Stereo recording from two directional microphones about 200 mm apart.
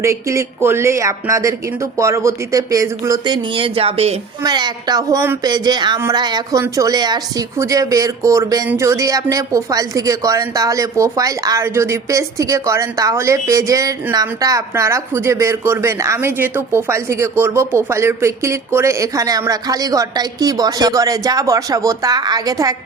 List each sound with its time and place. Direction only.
0.0 s speech: 15° right (ahead or behind)